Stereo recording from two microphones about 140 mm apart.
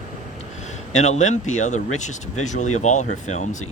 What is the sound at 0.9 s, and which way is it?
Speech, 55° left (ahead or behind).